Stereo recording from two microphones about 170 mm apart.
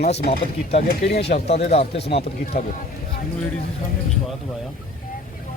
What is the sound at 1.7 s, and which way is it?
Speech, 35° left (ahead or behind).